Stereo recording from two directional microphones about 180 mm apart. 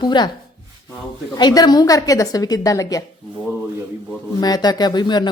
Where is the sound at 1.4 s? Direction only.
25° left (ahead or behind).